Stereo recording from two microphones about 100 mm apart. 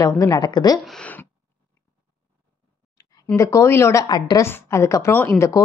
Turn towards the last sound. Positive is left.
turn(degrees=30)  # may be behind; listen again after turning